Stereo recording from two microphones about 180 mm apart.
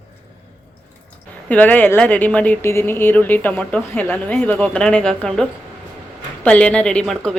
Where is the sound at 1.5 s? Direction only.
10° left (ahead or behind).